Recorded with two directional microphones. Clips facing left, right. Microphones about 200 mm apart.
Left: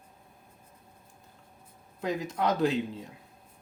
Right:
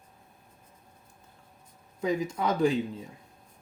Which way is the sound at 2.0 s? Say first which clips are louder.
Right 2 dB; centre (ahead or behind).